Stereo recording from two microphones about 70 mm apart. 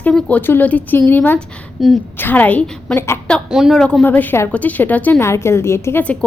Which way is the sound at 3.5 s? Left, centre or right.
Centre.